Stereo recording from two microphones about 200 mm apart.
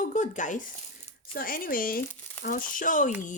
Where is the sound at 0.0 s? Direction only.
40° left (ahead or behind).